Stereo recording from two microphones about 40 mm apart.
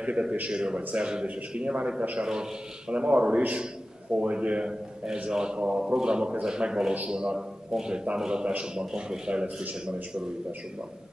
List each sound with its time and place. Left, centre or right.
0.0 s a man's voice: right
2.2 s speech: centre
2.9 s a man's voice: right